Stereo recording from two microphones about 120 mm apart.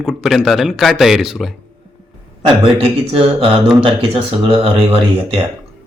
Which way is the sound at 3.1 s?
50° right (ahead or behind).